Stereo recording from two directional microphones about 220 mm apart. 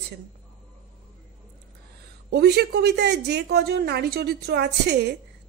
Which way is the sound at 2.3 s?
45° right (ahead or behind).